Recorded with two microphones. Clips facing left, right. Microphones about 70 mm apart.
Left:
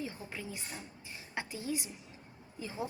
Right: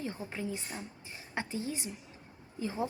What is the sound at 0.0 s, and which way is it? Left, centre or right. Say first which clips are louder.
A woman's voice: right 4 dB; right.